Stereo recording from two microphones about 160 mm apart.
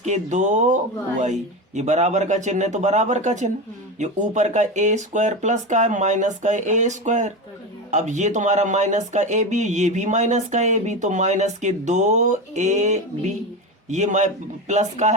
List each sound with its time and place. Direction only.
0.0 s speech: 45° right (ahead or behind)